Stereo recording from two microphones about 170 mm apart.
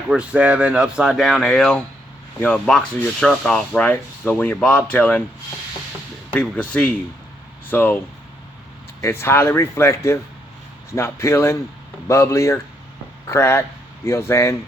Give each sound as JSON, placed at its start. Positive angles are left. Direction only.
{"t": 0.1, "sound": "speech", "side_deg": -5}
{"t": 6.3, "sound": "speech", "side_deg": 5}